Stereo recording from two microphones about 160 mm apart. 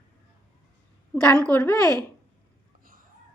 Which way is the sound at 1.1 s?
10° left (ahead or behind).